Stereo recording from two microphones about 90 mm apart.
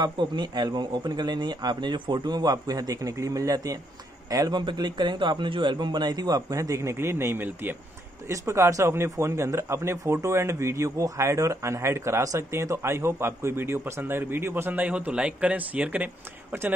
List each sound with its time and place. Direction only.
0.0 s speech: 55° right (ahead or behind); by 7.7 s 20° right (ahead or behind)
8.3 s speech: 35° right (ahead or behind); by 16.1 s 15° right (ahead or behind)